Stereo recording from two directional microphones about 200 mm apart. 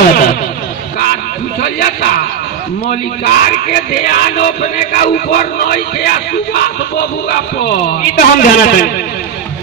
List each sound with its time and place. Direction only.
0.0 s a sound: 45° left (ahead or behind)
1.6 s speech: 50° left (ahead or behind)
8.2 s speech: 45° left (ahead or behind)